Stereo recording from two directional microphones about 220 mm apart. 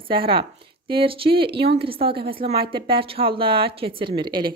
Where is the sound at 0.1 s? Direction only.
25° right (ahead or behind).